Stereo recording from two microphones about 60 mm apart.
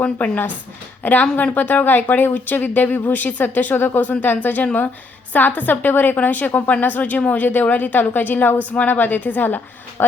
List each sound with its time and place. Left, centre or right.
0.0 s a woman's voice: left